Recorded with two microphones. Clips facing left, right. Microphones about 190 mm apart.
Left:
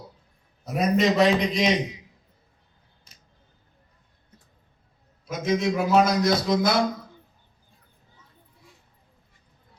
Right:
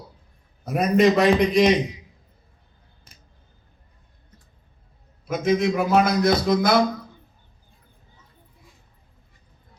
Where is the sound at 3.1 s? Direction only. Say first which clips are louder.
Right 4 dB; 55° right (ahead or behind).